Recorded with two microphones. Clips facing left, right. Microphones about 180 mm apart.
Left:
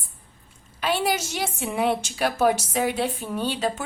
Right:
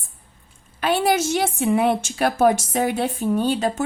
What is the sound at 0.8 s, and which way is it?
A woman's voice, 50° right (ahead or behind).